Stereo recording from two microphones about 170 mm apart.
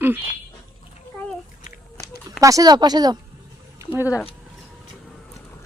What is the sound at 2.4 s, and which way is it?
Speech, 20° right (ahead or behind).